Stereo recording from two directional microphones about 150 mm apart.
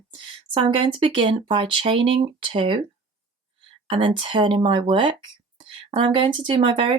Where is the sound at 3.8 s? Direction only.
35° right (ahead or behind).